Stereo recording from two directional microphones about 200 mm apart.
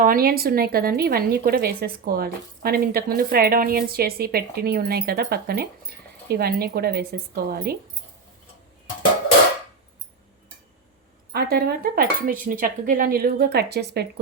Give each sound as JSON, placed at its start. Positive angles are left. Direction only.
{"t": 0.0, "sound": "a woman's voice", "side_deg": -45}
{"t": 11.3, "sound": "a woman's voice", "side_deg": -50}